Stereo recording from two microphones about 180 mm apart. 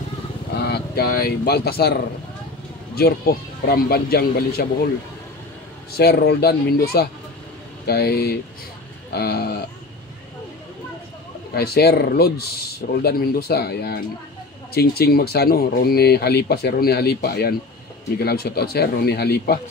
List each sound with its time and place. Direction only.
0.6 s speech: 65° left (ahead or behind)
3.0 s speech: 60° left (ahead or behind)
5.9 s speech: 65° left (ahead or behind)
11.5 s speech: 60° left (ahead or behind)